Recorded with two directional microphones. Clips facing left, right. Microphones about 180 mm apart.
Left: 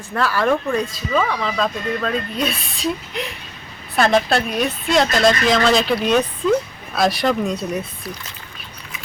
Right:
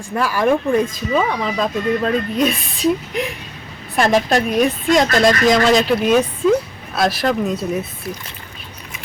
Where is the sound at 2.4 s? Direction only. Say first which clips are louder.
Right 5 dB; 45° right (ahead or behind).